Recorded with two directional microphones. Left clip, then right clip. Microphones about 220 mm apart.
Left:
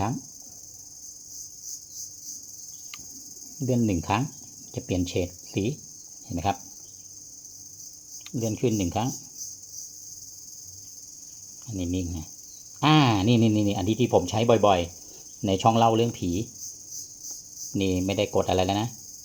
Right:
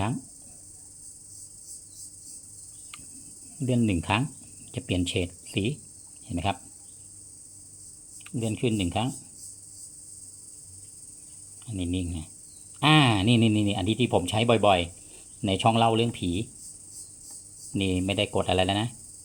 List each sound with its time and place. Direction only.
3.7 s speech: 30° right (ahead or behind)
8.4 s speech: 30° right (ahead or behind)
11.7 s speech: 30° right (ahead or behind)
17.8 s speech: 30° right (ahead or behind)